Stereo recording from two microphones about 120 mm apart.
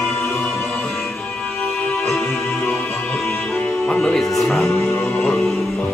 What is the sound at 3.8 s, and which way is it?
Music, centre (ahead or behind).